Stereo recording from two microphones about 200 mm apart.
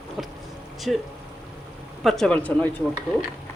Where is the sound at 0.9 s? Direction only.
Centre (ahead or behind).